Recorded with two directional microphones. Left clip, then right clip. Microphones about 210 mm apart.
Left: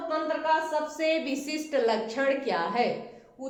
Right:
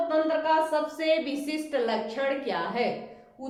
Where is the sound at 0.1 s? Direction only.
Centre (ahead or behind).